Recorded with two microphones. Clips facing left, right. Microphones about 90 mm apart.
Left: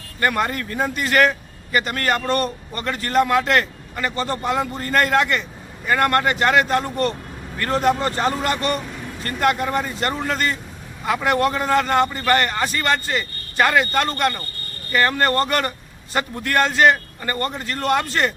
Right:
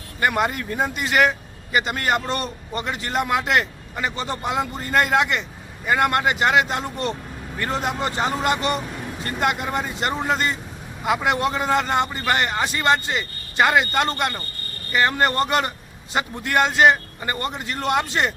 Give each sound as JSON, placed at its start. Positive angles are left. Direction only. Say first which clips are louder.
{"t": 0.2, "sound": "speech", "louder": "even", "side_deg": -15}